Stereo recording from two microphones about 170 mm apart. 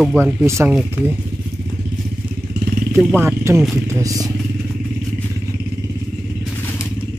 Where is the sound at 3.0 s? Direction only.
10° right (ahead or behind).